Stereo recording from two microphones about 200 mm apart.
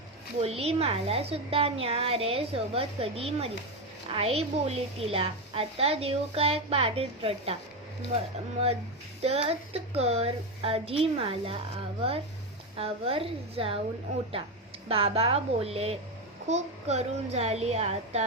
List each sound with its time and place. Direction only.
0.3 s a woman's voice: 30° right (ahead or behind)
9.2 s a woman's voice: 30° right (ahead or behind)
12.7 s a woman's voice: 30° right (ahead or behind)
14.8 s a woman's voice: 30° right (ahead or behind)